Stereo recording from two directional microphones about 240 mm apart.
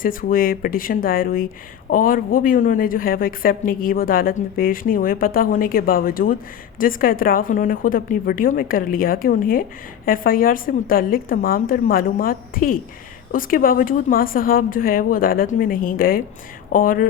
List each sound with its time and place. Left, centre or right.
0.0 s a woman's voice: left